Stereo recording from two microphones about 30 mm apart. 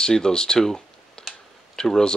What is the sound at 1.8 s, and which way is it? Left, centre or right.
Speech, left.